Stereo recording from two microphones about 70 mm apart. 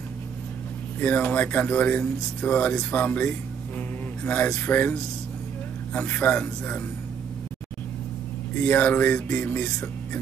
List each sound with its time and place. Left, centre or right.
0.9 s speech: left
5.9 s speech: left
8.5 s speech: left